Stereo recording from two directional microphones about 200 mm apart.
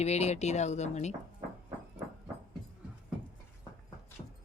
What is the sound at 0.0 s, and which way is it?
Speech, 35° left (ahead or behind).